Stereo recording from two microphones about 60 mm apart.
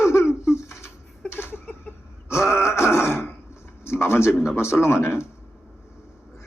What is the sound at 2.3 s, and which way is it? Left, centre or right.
Throat clearing, left.